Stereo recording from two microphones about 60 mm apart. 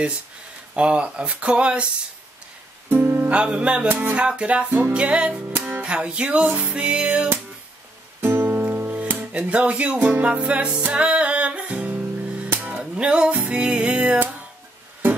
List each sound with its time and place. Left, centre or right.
0.7 s speech: centre
2.9 s speech: right
3.3 s speech: centre
4.9 s speech: centre
5.9 s music: centre
8.2 s music: right
9.4 s speech: centre
9.9 s speech: right
10.2 s music: right